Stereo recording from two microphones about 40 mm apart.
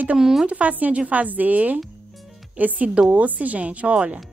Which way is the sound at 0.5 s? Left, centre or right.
Right.